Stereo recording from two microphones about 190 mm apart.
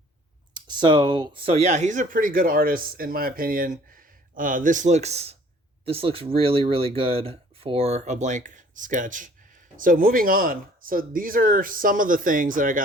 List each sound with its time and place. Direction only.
0.5 s speech: 25° right (ahead or behind); by 12.8 s 45° right (ahead or behind)